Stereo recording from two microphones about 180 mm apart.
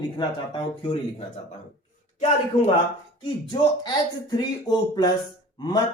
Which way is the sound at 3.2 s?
25° left (ahead or behind).